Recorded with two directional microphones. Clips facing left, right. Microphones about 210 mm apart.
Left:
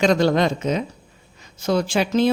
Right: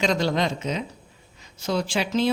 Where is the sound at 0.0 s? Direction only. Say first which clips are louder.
Left 6 dB; 55° left (ahead or behind).